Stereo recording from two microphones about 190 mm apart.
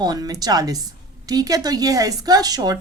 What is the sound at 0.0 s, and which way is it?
Speech, 20° right (ahead or behind).